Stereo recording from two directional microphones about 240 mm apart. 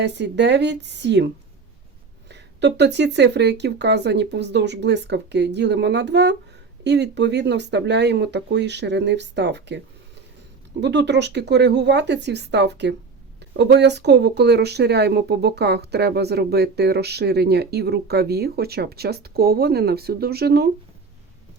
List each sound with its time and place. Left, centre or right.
0.0 s speech: right
2.3 s speech: right